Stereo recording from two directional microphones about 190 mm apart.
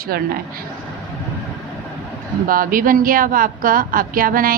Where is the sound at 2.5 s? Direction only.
45° right (ahead or behind).